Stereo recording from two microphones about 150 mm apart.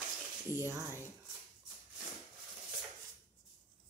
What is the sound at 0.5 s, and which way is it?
Speech, 15° right (ahead or behind).